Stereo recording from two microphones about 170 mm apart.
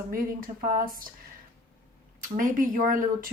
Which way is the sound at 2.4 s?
50° right (ahead or behind).